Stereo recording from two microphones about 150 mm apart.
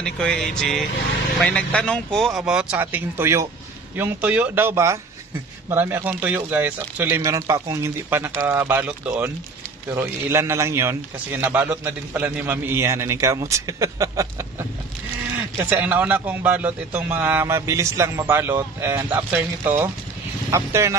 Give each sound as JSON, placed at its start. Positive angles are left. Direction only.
{"t": 0.0, "sound": "a man's voice", "side_deg": 5}
{"t": 7.2, "sound": "a man's voice", "side_deg": -20}